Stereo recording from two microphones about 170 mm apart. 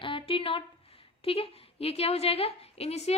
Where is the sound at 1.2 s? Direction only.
35° left (ahead or behind).